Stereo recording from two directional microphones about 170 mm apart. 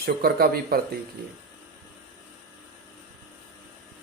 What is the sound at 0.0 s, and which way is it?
Speech, 60° right (ahead or behind).